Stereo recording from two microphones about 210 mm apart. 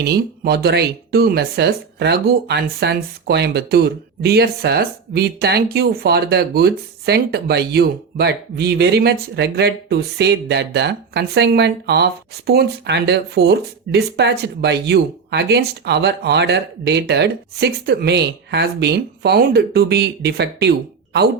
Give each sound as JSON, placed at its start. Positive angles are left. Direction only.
{"t": 0.0, "sound": "speech", "side_deg": -50}